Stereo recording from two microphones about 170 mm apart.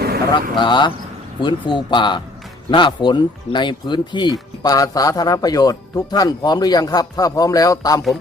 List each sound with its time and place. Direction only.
0.0 s vehicle: 65° right (ahead or behind)
0.5 s speech: 25° left (ahead or behind)